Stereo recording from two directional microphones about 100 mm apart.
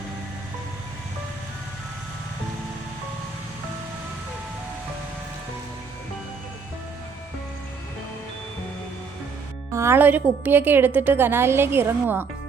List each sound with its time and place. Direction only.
9.7 s a woman's voice: 25° right (ahead or behind)